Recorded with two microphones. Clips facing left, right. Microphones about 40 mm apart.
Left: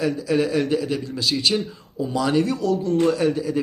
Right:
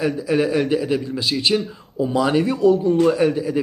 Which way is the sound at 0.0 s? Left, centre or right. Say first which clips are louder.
Right 2 dB; centre.